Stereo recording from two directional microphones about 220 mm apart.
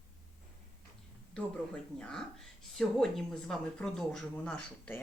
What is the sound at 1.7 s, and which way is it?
Speech, 5° left (ahead or behind).